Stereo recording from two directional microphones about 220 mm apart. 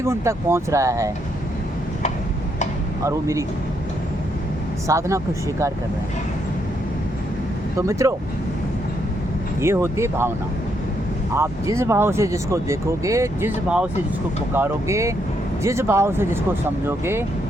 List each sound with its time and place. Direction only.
0.0 s speech: 10° right (ahead or behind)
3.0 s speech: 15° right (ahead or behind)
4.9 s speech: 15° right (ahead or behind)
7.8 s speech: 15° right (ahead or behind)
9.6 s speech: 10° right (ahead or behind)
11.3 s speech: 15° right (ahead or behind)